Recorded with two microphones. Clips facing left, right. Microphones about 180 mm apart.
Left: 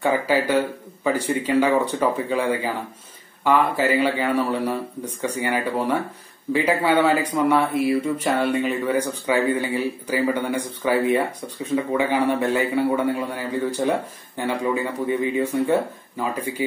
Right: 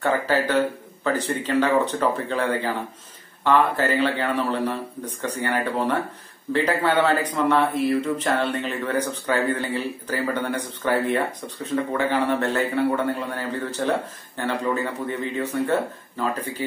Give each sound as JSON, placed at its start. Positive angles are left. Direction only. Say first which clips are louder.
{"t": 0.0, "sound": "speech", "louder": "left 2 dB", "side_deg": 10}